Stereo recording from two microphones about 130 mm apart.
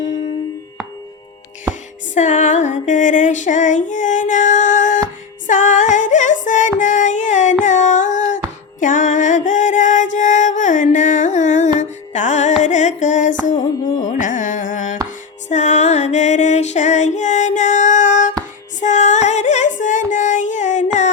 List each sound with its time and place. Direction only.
2.1 s female singing: 65° left (ahead or behind)
5.5 s music: 75° left (ahead or behind)
7.6 s a sound: 70° left (ahead or behind)
8.8 s music: 80° left
14.0 s carnatic music: 75° left (ahead or behind)
15.4 s music: 65° left (ahead or behind)
18.8 s female singing: 65° left (ahead or behind)